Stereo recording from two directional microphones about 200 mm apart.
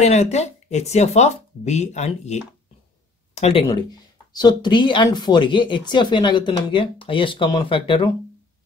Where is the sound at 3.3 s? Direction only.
30° left (ahead or behind).